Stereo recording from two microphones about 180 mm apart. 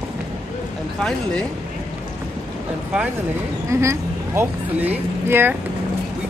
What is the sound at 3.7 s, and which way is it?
Speech, 15° right (ahead or behind).